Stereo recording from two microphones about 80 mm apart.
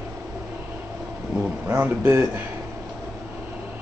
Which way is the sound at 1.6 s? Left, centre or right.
Centre.